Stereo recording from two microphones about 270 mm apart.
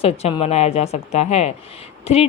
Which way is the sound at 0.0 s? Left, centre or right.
Left.